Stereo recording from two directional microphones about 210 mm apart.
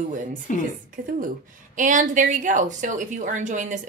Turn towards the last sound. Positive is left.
turn(degrees=-35)  # may be behind; listen again after turning